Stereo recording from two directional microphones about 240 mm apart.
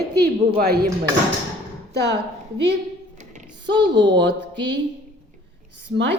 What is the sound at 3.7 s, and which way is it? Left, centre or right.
Speech, centre.